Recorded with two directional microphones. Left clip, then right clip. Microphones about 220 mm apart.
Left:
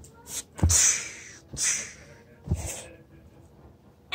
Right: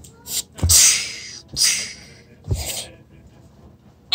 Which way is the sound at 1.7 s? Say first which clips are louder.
Right 8 dB; 35° right (ahead or behind).